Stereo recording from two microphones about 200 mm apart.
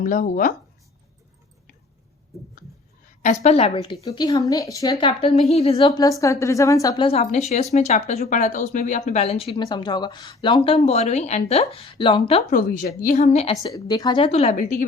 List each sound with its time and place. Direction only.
0.0 s speech: 45° left (ahead or behind)
3.4 s a woman's voice: 30° left (ahead or behind)
4.0 s a woman's voice: 20° left (ahead or behind)
6.0 s a woman's voice: 15° left (ahead or behind)
12.5 s a woman's voice: 45° left (ahead or behind)
13.6 s a woman's voice: 20° left (ahead or behind)
14.5 s a woman's voice: 40° left (ahead or behind)